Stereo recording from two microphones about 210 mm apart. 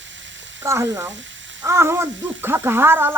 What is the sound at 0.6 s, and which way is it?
Speech, 15° right (ahead or behind).